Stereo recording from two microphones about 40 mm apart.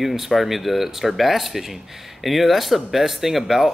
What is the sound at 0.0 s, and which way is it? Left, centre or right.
A man's voice, centre.